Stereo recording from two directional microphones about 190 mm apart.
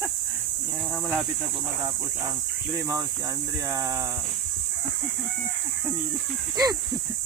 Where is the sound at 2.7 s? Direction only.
15° right (ahead or behind).